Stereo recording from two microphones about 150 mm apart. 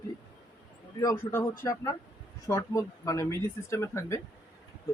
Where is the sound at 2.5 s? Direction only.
20° left (ahead or behind).